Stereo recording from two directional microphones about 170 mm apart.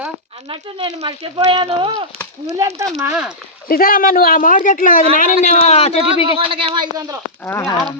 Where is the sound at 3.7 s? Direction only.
60° left (ahead or behind); by 6.4 s 35° left (ahead or behind).